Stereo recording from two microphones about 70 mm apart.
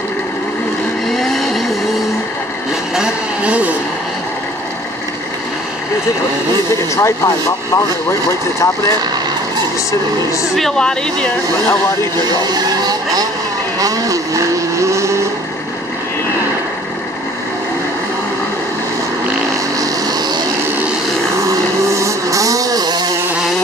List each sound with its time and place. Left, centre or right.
1.0 s vehicle: centre
2.9 s vehicle: centre
7.0 s speech: left
10.5 s speech: centre
12.4 s vehicle: right
13.7 s vehicle: right
19.8 s vehicle: right
21.4 s vehicle: right